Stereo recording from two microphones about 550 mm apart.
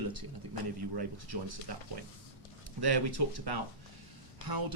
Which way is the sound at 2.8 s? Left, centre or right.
Right.